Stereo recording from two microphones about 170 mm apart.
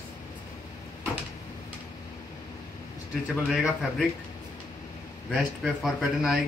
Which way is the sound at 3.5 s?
5° right (ahead or behind).